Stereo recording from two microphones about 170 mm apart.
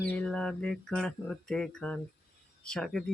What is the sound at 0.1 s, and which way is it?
Speech, 5° left (ahead or behind).